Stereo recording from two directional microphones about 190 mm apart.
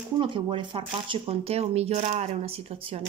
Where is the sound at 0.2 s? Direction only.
25° right (ahead or behind).